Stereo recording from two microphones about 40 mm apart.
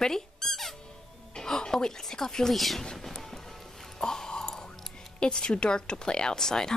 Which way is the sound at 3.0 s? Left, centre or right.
Centre.